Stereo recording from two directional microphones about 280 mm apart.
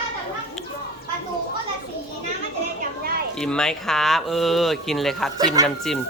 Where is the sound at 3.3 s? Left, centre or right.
Centre.